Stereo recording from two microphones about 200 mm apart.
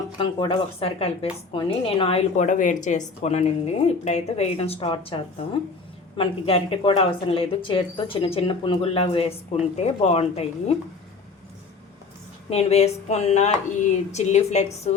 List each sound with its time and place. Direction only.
0.2 s a woman's voice: 25° left (ahead or behind)
12.5 s a woman's voice: 30° left (ahead or behind)